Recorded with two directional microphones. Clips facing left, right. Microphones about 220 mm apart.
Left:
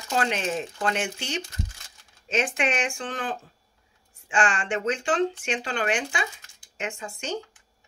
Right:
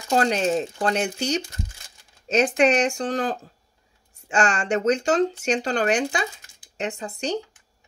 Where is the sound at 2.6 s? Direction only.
40° right (ahead or behind).